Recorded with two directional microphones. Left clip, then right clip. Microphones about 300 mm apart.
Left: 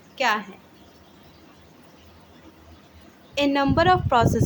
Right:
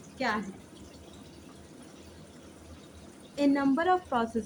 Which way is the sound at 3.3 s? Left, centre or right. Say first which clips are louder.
Left 6 dB; left.